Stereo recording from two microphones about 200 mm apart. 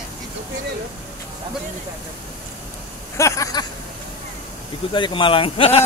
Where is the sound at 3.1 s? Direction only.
15° left (ahead or behind).